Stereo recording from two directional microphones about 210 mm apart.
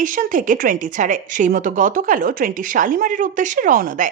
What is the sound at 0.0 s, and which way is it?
A woman's voice, 40° right (ahead or behind).